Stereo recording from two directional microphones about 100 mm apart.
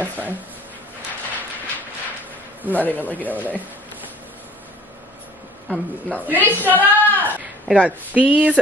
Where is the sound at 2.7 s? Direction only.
15° left (ahead or behind).